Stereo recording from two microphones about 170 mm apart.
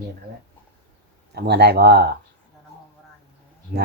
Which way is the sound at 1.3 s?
75° right (ahead or behind).